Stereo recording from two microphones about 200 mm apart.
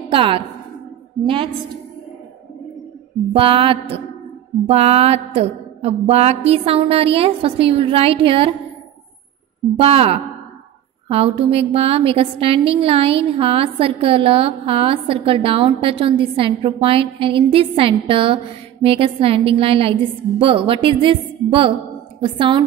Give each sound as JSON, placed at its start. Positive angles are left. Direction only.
{"t": 0.1, "sound": "a woman's voice", "side_deg": -25}
{"t": 3.3, "sound": "a woman's voice", "side_deg": -25}
{"t": 9.8, "sound": "a woman's voice", "side_deg": -30}